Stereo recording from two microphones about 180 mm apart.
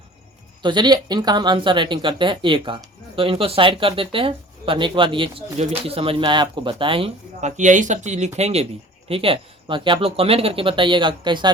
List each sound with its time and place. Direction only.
0.6 s speech: 25° right (ahead or behind)